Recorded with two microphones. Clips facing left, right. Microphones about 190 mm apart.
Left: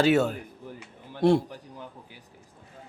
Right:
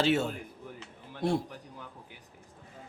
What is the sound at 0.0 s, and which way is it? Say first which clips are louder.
Speech: left 6 dB; 65° left (ahead or behind).